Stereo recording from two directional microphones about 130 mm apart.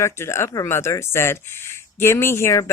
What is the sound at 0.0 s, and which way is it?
Speech, 20° left (ahead or behind).